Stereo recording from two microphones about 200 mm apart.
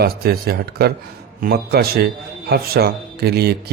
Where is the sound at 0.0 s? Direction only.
50° right (ahead or behind).